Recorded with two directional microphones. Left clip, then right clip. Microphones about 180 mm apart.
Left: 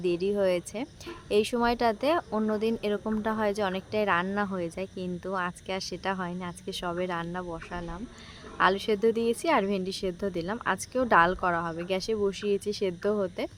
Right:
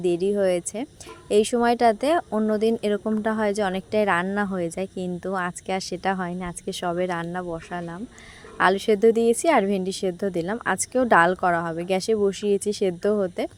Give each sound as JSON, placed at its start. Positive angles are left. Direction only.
{"t": 0.0, "sound": "speech", "side_deg": -25}